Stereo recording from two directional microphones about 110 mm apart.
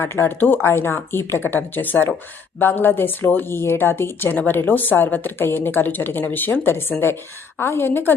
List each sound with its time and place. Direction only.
0.0 s speech: 25° left (ahead or behind)